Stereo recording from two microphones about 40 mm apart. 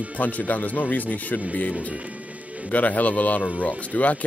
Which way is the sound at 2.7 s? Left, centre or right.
Left.